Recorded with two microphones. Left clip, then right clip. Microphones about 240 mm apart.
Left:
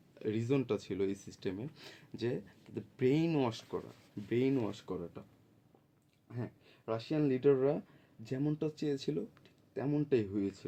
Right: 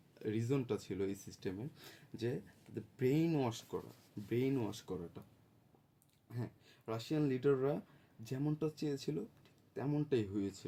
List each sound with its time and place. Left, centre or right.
0.1 s speech: centre
6.2 s speech: centre